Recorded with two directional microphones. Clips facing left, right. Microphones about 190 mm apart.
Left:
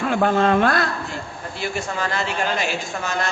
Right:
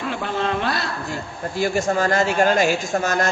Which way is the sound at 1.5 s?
40° right (ahead or behind).